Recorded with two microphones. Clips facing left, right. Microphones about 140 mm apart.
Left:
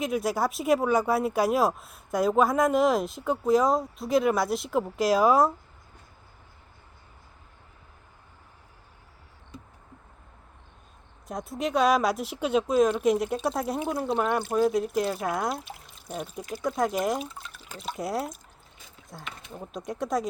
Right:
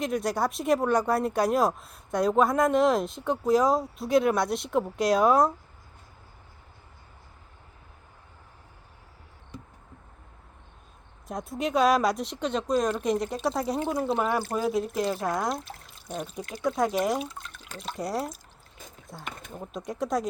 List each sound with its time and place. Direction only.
0.0 s speech: 5° left (ahead or behind)
11.3 s speech: centre (ahead or behind)